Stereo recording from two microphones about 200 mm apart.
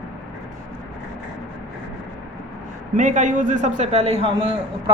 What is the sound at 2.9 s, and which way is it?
A man's voice, 40° right (ahead or behind).